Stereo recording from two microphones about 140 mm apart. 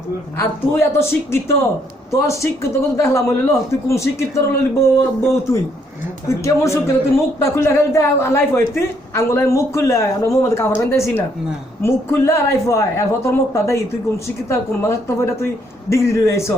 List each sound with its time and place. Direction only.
0.3 s a woman's voice: 20° left (ahead or behind)